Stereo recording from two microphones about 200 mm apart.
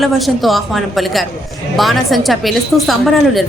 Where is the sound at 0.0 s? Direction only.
Centre (ahead or behind).